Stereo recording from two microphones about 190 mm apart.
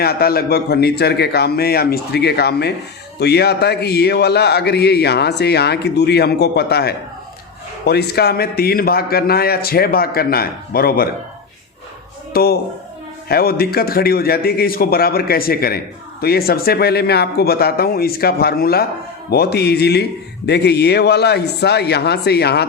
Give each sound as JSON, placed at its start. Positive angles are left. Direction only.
{"t": 0.0, "sound": "speech", "side_deg": 55}
{"t": 12.3, "sound": "speech", "side_deg": 55}